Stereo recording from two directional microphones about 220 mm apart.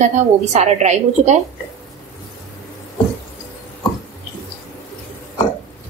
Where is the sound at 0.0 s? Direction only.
30° right (ahead or behind).